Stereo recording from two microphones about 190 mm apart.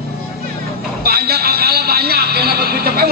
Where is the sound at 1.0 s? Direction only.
55° right (ahead or behind).